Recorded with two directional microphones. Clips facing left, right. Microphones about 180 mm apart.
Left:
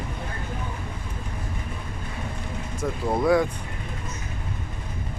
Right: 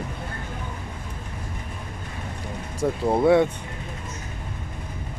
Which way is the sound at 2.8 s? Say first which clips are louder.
Right 4 dB; 25° right (ahead or behind).